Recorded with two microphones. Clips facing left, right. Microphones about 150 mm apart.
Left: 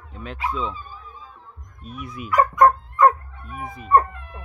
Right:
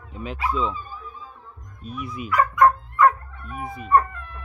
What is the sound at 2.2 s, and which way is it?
Dog, 40° left (ahead or behind).